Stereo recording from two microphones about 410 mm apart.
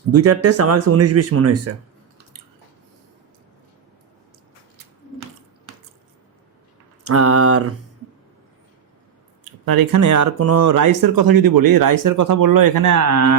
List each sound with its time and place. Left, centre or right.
0.1 s speech: right
7.0 s speech: right
9.4 s speech: right